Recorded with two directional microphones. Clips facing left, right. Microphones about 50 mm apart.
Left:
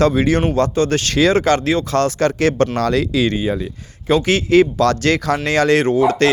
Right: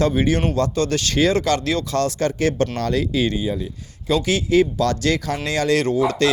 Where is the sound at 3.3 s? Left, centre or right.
Left.